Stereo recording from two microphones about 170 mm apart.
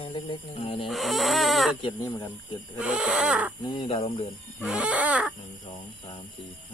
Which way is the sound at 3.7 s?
35° left (ahead or behind).